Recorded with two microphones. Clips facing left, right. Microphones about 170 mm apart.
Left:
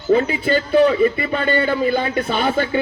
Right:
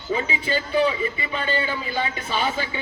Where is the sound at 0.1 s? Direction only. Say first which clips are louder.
Left 9 dB; 55° left (ahead or behind).